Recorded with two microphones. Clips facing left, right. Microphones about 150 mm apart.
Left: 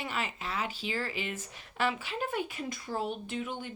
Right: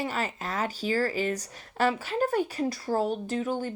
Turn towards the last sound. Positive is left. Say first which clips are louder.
# right 7 dB
turn(degrees=-40)  # may be behind; listen again after turning